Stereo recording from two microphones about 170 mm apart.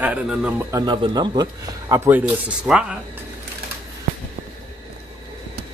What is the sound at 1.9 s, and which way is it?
Speech, 15° right (ahead or behind).